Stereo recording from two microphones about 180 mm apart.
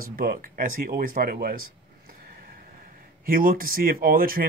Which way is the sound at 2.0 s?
55° right (ahead or behind).